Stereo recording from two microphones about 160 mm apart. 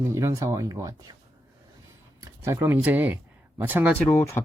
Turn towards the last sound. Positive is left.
turn(degrees=15)  # may be behind; listen again after turning